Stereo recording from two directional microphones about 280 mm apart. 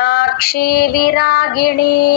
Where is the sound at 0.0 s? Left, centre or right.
Left.